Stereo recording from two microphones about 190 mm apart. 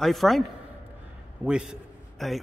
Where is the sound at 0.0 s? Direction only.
Centre (ahead or behind).